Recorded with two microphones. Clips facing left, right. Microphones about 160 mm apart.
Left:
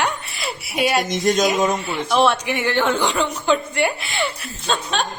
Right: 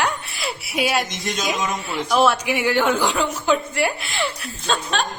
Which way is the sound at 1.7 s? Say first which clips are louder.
Left 1 dB; centre (ahead or behind).